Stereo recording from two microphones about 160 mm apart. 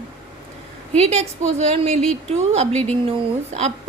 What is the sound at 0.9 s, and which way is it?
A woman's voice, 40° right (ahead or behind).